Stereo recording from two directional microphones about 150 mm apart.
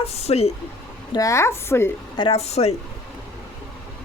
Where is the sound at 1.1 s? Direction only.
20° left (ahead or behind).